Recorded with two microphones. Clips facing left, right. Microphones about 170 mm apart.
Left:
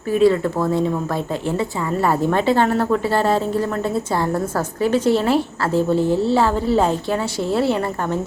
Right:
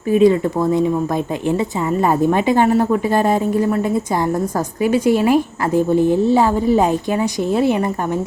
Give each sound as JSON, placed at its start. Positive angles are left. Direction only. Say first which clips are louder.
{"t": 0.1, "sound": "a woman's voice", "louder": "right 3 dB", "side_deg": -20}